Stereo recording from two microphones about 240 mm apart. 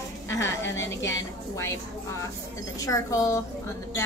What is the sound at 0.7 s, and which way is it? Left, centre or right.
A woman's voice, centre.